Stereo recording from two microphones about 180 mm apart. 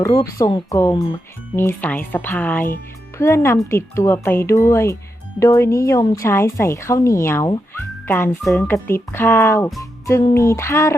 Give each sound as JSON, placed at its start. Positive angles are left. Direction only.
{"t": 0.0, "sound": "speech", "side_deg": 15}